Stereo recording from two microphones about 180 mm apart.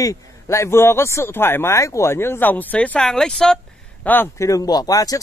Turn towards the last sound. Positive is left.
turn(degrees=20)  # may be behind; listen again after turning